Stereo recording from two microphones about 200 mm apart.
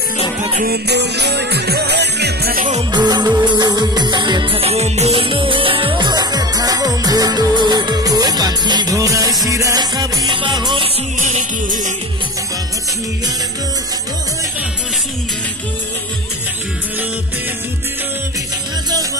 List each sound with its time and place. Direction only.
0.7 s music: 55° right (ahead or behind)
2.9 s music: 20° right (ahead or behind)
11.1 s music: 40° right (ahead or behind)